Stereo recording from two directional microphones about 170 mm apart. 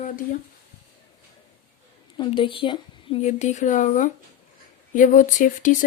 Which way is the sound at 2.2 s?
30° left (ahead or behind).